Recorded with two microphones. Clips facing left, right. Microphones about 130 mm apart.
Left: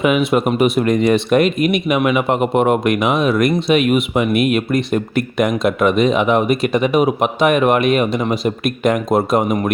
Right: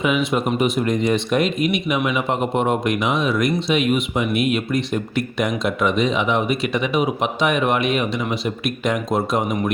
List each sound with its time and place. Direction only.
0.0 s speech: 60° left (ahead or behind)